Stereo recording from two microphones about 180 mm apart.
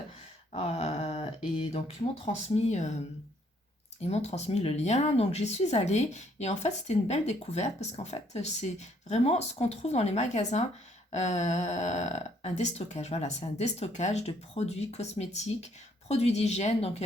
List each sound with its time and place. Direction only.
0.5 s a sound: 35° left (ahead or behind)
2.2 s speech: 35° left (ahead or behind)
4.0 s speech: 35° left (ahead or behind)